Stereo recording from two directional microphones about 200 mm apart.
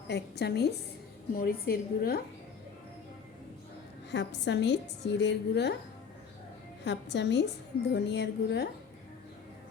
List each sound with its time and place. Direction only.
0.1 s a woman's voice: 55° left (ahead or behind)
4.1 s a woman's voice: 60° left (ahead or behind)
6.8 s a woman's voice: 60° left (ahead or behind)